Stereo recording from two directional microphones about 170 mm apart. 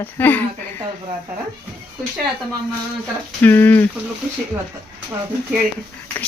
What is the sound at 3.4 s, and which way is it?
Speech, 10° left (ahead or behind).